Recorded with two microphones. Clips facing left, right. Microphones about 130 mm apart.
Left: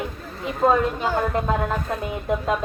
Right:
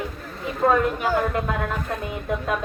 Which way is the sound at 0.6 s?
20° left (ahead or behind).